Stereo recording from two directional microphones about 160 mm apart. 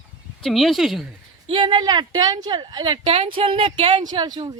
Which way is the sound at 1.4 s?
30° right (ahead or behind).